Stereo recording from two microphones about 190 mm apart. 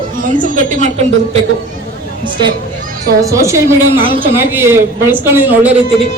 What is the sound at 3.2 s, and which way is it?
A woman's voice, 15° right (ahead or behind).